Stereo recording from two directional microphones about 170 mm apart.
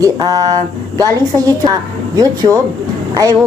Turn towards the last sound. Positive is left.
turn(degrees=-20)  # may be behind; listen again after turning